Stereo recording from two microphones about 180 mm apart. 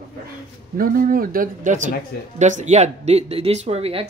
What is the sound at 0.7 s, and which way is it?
Speech, 50° right (ahead or behind).